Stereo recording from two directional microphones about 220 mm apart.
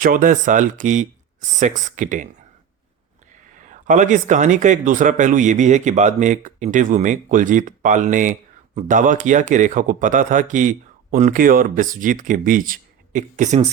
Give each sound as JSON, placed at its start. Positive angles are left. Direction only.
{"t": 0.0, "sound": "speech", "side_deg": -40}
{"t": 3.6, "sound": "speech", "side_deg": -35}